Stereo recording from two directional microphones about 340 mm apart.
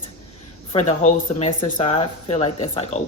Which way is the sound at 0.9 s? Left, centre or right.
Centre.